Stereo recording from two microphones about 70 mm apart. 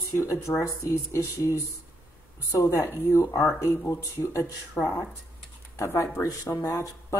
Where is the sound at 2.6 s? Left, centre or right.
Left.